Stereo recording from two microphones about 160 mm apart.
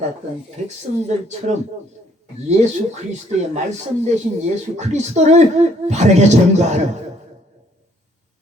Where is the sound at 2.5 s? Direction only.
45° right (ahead or behind).